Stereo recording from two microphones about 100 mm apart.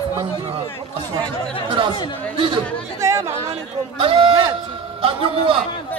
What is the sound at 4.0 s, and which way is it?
A man's voice, 65° right (ahead or behind).